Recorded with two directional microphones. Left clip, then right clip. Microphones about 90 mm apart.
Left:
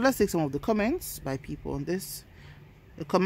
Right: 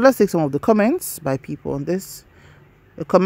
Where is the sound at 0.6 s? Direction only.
60° right (ahead or behind).